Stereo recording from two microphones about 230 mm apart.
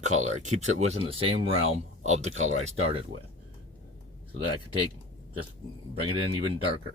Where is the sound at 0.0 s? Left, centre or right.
Right.